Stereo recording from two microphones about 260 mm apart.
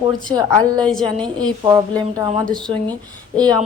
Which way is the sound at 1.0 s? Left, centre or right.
Centre.